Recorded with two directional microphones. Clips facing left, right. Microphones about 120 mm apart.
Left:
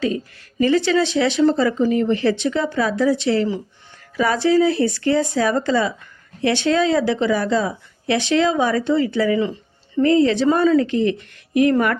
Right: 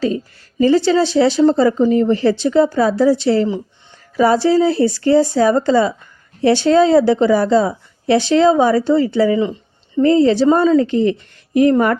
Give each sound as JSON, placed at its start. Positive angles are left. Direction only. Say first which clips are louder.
{"t": 0.6, "sound": "a woman's voice", "louder": "right 4 dB", "side_deg": -35}